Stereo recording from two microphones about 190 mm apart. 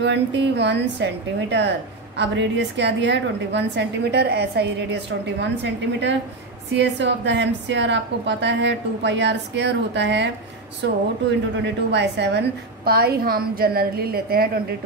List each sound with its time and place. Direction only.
0.0 s a woman's voice: 65° right (ahead or behind)